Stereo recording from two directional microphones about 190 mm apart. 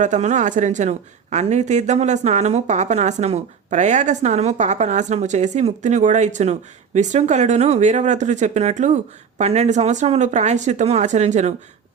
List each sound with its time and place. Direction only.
0.0 s speech: 40° right (ahead or behind)